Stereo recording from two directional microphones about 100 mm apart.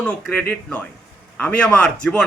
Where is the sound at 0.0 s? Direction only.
10° left (ahead or behind).